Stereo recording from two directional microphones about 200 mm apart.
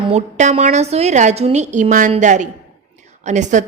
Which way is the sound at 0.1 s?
35° right (ahead or behind).